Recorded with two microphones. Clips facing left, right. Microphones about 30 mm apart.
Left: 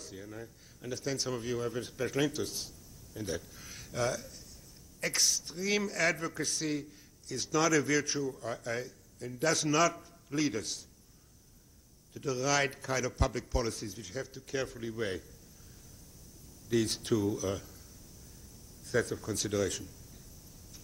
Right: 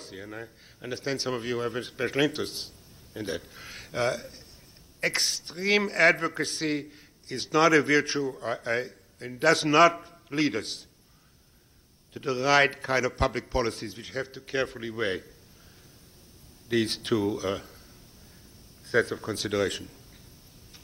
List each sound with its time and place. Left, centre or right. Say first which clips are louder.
0.0 s speech: right 5 dB; right
12.1 s speech: right 7 dB; right
16.6 s speech: right 4 dB; right
18.9 s speech: right 6 dB; right